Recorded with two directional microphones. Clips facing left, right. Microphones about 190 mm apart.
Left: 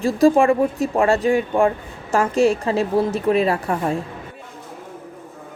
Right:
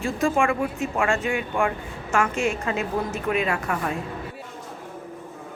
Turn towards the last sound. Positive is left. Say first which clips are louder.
# left 5 dB
turn(degrees=30)  # may be behind; listen again after turning